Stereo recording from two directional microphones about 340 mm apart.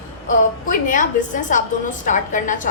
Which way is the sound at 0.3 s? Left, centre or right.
Left.